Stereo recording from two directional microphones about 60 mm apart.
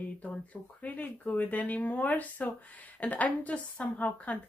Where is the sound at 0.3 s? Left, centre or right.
Left.